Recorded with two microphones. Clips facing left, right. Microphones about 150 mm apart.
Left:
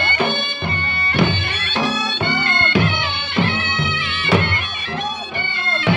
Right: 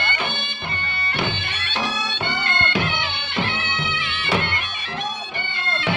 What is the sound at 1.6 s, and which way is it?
Bagpipes, 45° left (ahead or behind).